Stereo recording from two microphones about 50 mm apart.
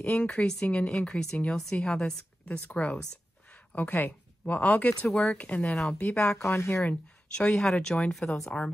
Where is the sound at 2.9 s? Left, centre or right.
Centre.